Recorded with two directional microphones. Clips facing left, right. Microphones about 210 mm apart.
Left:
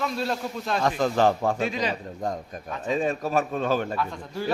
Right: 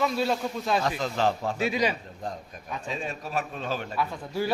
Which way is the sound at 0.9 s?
55° left (ahead or behind).